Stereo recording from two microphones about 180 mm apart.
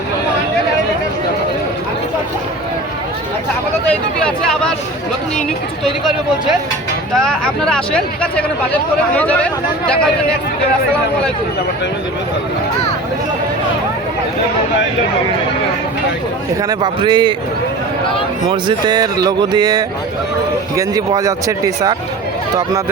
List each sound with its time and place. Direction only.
3.8 s speech: 5° left (ahead or behind)
5.8 s speech: centre (ahead or behind)
16.6 s speech: 20° right (ahead or behind)
18.4 s speech: 25° right (ahead or behind)